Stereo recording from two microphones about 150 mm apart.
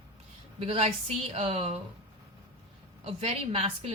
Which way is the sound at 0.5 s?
40° right (ahead or behind).